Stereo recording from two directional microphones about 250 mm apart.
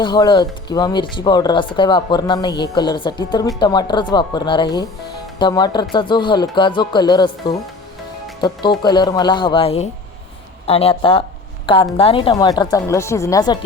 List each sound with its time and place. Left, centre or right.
0.0 s speech: centre